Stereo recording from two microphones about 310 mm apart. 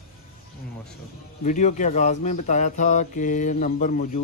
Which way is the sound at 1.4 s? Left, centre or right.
Left.